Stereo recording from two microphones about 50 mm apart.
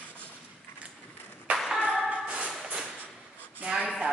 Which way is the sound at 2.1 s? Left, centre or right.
Right.